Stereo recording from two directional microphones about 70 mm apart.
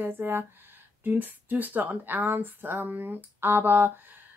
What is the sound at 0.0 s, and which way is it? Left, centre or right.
Speech, right.